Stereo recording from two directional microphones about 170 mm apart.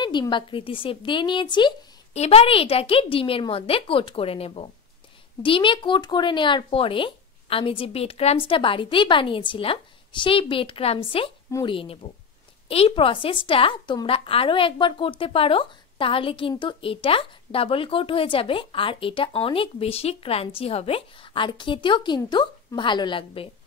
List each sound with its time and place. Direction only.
0.0 s a woman's voice: 25° left (ahead or behind)
2.1 s a woman's voice: 40° left (ahead or behind)